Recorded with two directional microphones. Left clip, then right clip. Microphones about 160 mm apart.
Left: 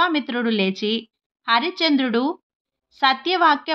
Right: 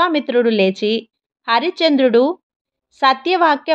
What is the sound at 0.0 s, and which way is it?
A woman's voice, 30° right (ahead or behind).